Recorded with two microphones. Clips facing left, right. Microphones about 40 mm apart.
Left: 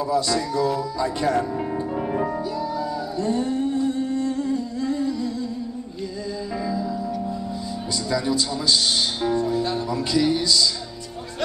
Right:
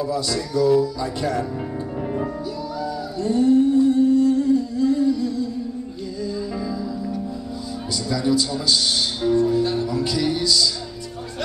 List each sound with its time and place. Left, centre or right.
0.1 s a man's voice: left
3.2 s humming: left
8.1 s speech: left
9.2 s a man's voice: left